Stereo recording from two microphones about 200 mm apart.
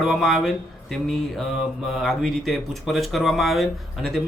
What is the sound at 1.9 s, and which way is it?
Mantra, centre (ahead or behind).